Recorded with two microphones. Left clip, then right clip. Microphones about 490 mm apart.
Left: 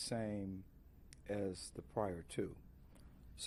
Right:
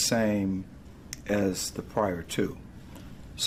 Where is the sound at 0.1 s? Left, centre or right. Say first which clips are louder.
Right 16 dB; left.